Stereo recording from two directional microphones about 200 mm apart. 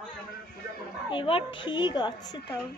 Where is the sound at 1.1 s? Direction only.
25° left (ahead or behind).